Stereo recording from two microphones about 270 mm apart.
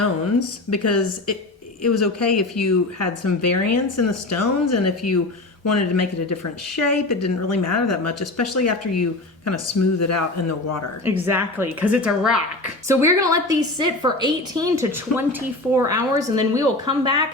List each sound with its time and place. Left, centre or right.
0.0 s a woman's voice: left
11.0 s a woman's voice: centre